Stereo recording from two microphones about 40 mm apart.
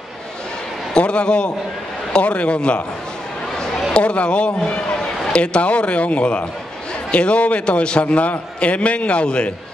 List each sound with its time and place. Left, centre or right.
0.9 s a man's voice: left
3.9 s a man's voice: left